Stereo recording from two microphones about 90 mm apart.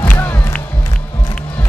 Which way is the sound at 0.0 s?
20° left (ahead or behind).